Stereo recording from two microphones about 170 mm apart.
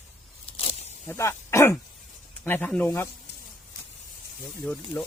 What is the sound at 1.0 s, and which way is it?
Speech, 15° left (ahead or behind).